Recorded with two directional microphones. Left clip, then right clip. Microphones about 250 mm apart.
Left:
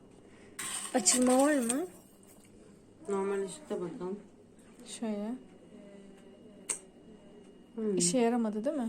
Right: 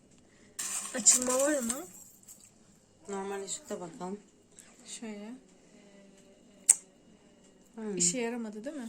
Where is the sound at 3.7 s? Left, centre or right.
Right.